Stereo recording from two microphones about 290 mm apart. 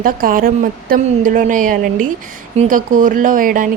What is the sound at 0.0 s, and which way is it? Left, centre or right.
Speech, right.